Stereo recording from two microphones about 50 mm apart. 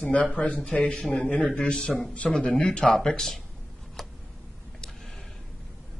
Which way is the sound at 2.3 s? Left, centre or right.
Centre.